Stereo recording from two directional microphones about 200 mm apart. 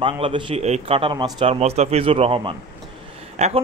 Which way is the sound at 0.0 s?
25° right (ahead or behind).